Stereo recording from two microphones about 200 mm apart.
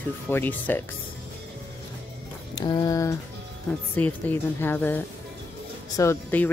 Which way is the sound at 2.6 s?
20° left (ahead or behind).